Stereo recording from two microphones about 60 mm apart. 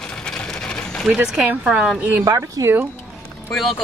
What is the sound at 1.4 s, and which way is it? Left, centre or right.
Speech, centre.